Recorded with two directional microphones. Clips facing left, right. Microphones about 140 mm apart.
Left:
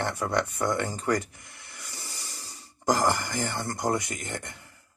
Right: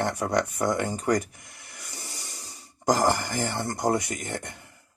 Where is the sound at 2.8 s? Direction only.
20° right (ahead or behind).